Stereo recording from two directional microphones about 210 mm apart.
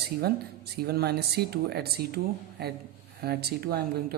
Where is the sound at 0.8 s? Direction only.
50° right (ahead or behind).